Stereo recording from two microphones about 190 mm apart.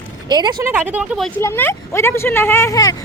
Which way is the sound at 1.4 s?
10° left (ahead or behind).